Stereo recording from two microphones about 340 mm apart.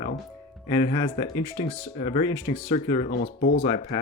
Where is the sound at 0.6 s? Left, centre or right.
Centre; by 3.6 s left.